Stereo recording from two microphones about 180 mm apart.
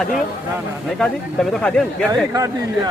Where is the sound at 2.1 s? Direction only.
20° right (ahead or behind).